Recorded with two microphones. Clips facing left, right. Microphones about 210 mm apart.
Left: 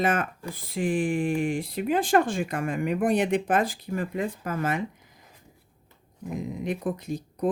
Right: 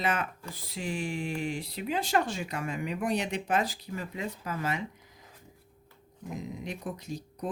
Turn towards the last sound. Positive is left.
turn(degrees=55)  # may be behind; listen again after turning